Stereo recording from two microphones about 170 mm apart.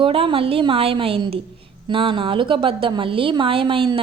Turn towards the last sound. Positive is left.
turn(degrees=-30)  # may be behind; listen again after turning